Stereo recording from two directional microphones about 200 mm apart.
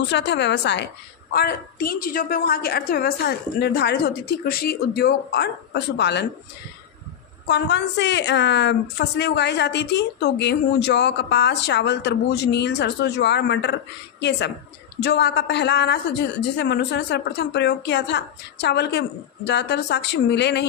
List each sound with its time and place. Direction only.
0.1 s a woman's voice: 60° left (ahead or behind)
7.4 s a woman's voice: 60° left (ahead or behind)